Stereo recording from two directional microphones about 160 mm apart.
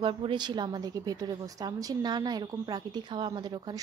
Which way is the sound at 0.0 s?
30° right (ahead or behind).